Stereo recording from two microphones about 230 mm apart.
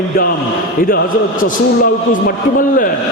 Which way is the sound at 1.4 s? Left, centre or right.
Left.